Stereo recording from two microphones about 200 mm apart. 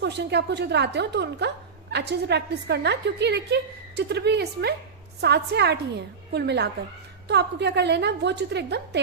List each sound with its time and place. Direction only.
0.0 s a woman's voice: 55° right (ahead or behind)